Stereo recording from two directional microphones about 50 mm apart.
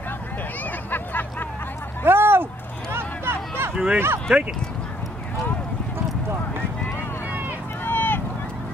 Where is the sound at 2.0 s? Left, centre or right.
Right.